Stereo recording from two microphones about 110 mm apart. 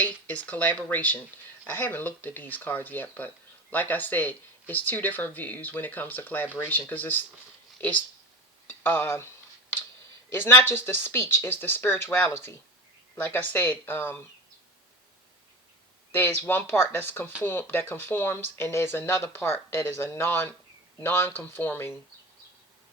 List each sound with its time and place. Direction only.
0.0 s speech: 15° left (ahead or behind)
10.3 s speech: 20° left (ahead or behind)
16.1 s speech: 20° left (ahead or behind)